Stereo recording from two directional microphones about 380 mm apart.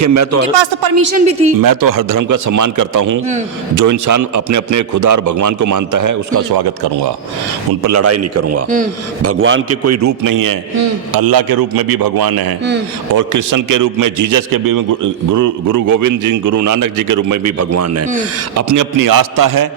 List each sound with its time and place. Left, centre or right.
0.0 s a man's voice: right
1.1 s speech: centre
1.6 s a man's voice: right
7.9 s a man's voice: right
13.1 s a man's voice: right